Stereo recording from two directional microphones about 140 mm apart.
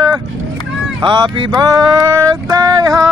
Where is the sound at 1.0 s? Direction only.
35° right (ahead or behind).